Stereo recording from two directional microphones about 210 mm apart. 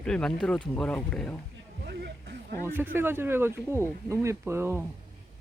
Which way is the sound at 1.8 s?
55° right (ahead or behind).